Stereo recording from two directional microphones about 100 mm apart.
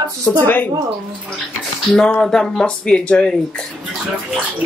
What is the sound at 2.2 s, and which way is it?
Speech, 5° left (ahead or behind).